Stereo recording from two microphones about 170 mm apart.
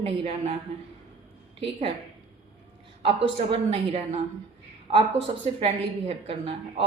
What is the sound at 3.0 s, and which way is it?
Speech, 30° right (ahead or behind).